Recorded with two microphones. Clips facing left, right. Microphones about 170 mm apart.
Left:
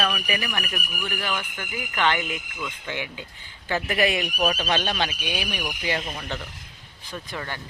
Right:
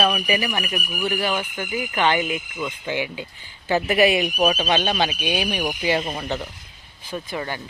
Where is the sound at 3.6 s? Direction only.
20° right (ahead or behind).